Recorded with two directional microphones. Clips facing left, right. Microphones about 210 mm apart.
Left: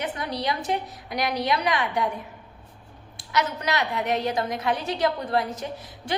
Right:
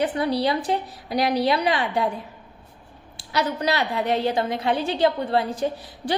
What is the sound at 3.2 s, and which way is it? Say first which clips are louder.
A woman's voice: right 2 dB; 30° right (ahead or behind).